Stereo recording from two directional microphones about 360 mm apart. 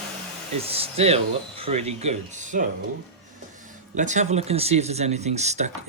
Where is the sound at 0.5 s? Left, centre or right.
Centre.